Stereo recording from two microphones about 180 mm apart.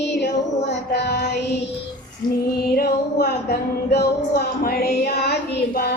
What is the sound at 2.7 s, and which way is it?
Speech, 65° left (ahead or behind).